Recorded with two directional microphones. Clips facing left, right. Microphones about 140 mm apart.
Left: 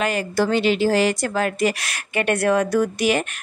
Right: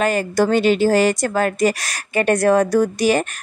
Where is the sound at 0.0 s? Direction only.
45° right (ahead or behind).